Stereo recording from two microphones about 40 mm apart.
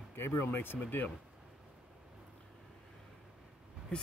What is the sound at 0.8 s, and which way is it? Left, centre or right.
Speech, left.